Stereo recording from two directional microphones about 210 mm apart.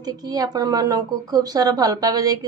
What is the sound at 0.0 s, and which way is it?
Speech, 20° right (ahead or behind).